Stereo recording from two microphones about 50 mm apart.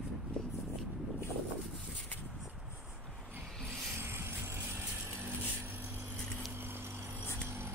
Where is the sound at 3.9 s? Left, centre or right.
Right.